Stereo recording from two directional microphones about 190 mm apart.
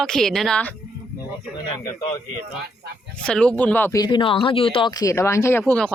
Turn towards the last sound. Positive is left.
turn(degrees=10)  # may be behind; listen again after turning